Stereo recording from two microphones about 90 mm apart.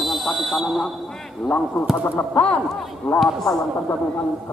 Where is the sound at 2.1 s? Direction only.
15° left (ahead or behind).